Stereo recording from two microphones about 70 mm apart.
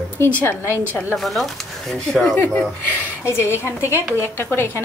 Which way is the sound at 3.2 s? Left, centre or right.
Left.